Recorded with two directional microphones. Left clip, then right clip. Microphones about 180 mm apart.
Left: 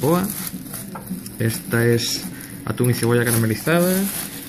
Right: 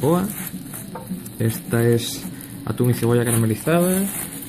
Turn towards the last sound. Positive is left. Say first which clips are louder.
# left 1 dB
turn(degrees=-5)  # may be behind; listen again after turning